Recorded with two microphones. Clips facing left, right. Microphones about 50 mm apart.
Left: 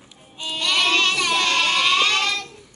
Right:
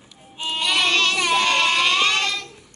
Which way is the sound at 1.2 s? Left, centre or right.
Centre.